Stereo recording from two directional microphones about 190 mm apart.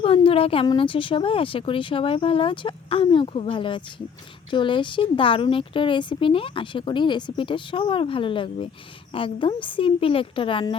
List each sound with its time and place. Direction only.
0.0 s a woman's voice: 30° left (ahead or behind)